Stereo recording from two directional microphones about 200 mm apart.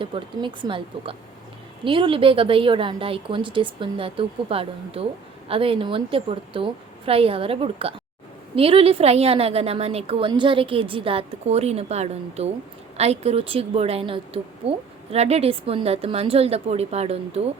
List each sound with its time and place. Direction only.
0.0 s a woman's voice: 25° right (ahead or behind)